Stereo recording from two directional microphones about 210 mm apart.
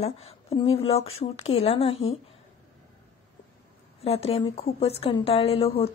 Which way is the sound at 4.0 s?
30° left (ahead or behind).